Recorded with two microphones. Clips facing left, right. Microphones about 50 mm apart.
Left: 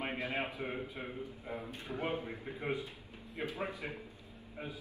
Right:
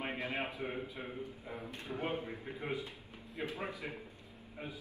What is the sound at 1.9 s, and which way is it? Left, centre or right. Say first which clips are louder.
Speech: left 1 dB; centre.